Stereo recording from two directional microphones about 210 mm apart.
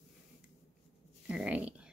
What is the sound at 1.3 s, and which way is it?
Speech, 5° right (ahead or behind).